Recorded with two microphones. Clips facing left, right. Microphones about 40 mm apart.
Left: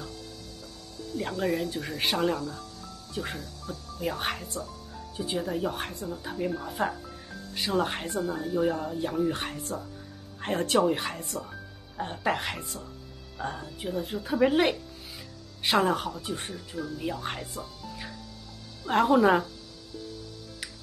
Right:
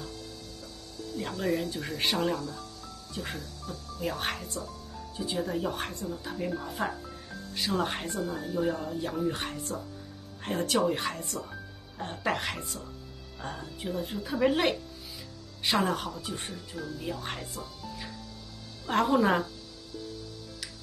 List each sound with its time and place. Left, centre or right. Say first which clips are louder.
1.1 s speech: left 2 dB; centre
5.1 s speech: left 2 dB; left
5.4 s speech: right 1 dB; centre
10.4 s speech: left 2 dB; left
10.9 s speech: left 2 dB; centre
11.1 s speech: left 1 dB; left
12.0 s speech: left 2 dB; centre
15.8 s speech: left 3 dB; centre